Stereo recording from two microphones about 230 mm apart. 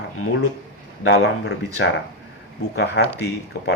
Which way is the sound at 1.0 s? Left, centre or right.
Left.